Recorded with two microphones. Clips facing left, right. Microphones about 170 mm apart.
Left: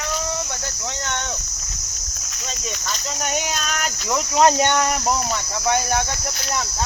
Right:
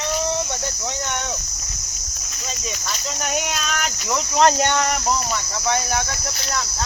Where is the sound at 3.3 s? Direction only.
Centre (ahead or behind).